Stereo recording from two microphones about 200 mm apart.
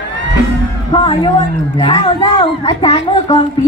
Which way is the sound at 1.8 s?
25° left (ahead or behind).